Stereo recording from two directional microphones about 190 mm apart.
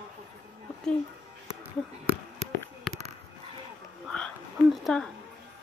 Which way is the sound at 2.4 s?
35° right (ahead or behind).